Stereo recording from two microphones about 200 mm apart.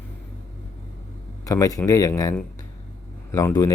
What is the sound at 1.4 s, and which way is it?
Speech, 15° left (ahead or behind).